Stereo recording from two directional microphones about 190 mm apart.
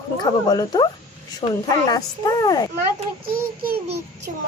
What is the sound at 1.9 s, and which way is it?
Speech, 20° left (ahead or behind).